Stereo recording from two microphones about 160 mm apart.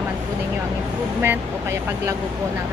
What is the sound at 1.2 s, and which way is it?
Speech, 15° right (ahead or behind).